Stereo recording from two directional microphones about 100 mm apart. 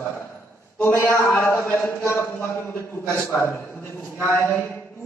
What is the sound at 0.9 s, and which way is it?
A man's voice, 25° left (ahead or behind).